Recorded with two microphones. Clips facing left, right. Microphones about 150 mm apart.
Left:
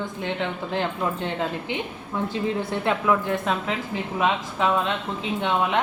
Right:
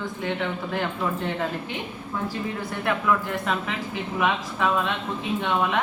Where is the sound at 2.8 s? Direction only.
20° left (ahead or behind).